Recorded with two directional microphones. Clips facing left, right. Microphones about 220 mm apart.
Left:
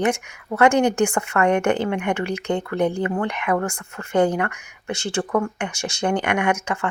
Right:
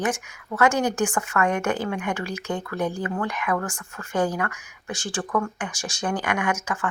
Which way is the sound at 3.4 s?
25° left (ahead or behind).